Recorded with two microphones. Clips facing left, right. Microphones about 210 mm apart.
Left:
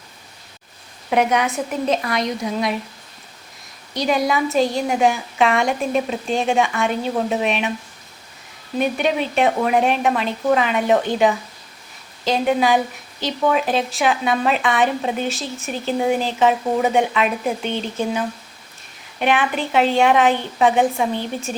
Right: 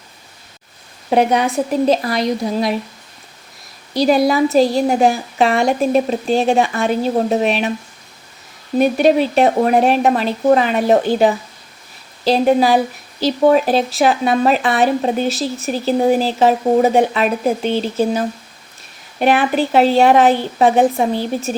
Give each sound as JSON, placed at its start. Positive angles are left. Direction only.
{"t": 1.1, "sound": "a woman's voice", "side_deg": -35}
{"t": 3.9, "sound": "a woman's voice", "side_deg": -35}
{"t": 8.8, "sound": "a woman's voice", "side_deg": -40}